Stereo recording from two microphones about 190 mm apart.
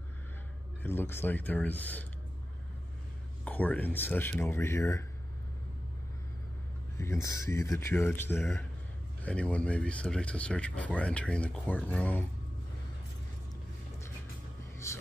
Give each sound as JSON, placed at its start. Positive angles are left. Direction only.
{"t": 0.8, "sound": "speech", "side_deg": 10}
{"t": 3.4, "sound": "speech", "side_deg": 10}
{"t": 7.0, "sound": "speech", "side_deg": 15}
{"t": 14.8, "sound": "music", "side_deg": 15}